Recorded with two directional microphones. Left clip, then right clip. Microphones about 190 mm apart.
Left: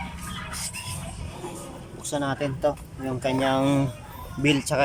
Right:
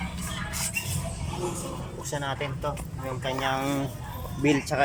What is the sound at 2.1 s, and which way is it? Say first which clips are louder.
Speech: left 4 dB; 20° left (ahead or behind).